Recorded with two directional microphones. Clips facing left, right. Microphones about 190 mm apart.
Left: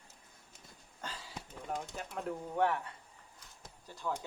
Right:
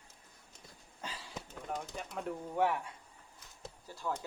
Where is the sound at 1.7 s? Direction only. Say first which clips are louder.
Even; 5° left (ahead or behind).